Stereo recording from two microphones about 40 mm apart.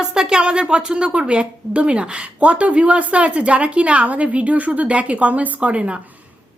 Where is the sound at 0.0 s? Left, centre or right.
Centre.